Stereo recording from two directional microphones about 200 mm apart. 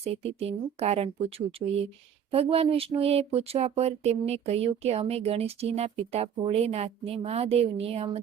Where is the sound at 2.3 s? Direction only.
30° right (ahead or behind).